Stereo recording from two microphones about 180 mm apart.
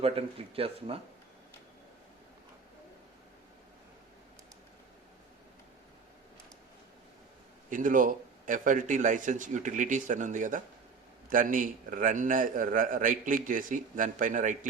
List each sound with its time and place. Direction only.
0.0 s speech: 30° right (ahead or behind)
7.7 s a man's voice: 50° right (ahead or behind)